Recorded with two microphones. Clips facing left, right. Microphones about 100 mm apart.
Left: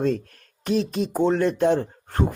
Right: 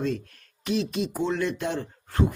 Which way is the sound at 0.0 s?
40° left (ahead or behind).